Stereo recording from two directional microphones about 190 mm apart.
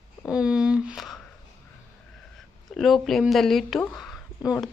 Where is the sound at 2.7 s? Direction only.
Centre (ahead or behind).